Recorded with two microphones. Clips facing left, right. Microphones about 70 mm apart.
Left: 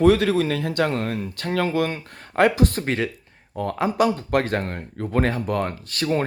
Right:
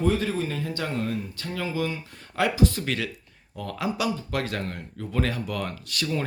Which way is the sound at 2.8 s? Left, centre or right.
Left.